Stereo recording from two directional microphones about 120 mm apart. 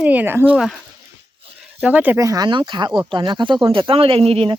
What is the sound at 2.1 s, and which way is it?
Speech, 30° right (ahead or behind).